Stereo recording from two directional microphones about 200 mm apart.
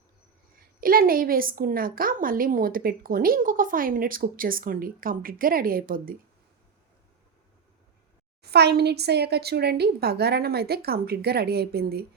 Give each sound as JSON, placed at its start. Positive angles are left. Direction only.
{"t": 0.8, "sound": "a woman's voice", "side_deg": -45}
{"t": 8.4, "sound": "a woman's voice", "side_deg": -55}